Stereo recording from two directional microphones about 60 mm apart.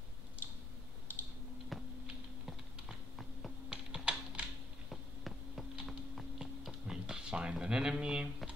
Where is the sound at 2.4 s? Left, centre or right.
Centre.